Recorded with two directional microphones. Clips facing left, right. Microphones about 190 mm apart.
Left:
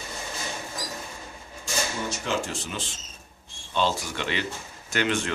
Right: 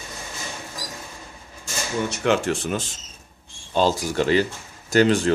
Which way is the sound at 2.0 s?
65° right (ahead or behind).